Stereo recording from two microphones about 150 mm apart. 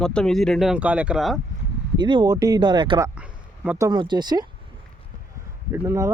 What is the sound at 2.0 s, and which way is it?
Speech, 30° right (ahead or behind).